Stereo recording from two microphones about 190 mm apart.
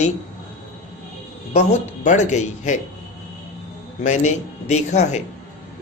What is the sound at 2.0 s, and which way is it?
Speech, 40° left (ahead or behind).